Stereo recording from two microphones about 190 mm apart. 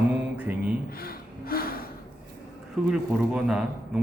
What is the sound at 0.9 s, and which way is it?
Gasp, 50° left (ahead or behind).